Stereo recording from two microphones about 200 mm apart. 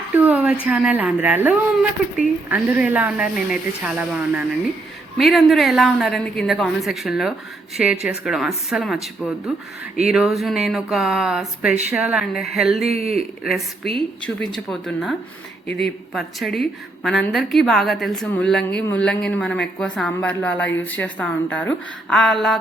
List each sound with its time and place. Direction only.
0.2 s a sound: 5° right (ahead or behind)
0.6 s a woman's voice: 5° right (ahead or behind)
12.8 s speech: 30° right (ahead or behind)
13.4 s a woman's voice: centre (ahead or behind)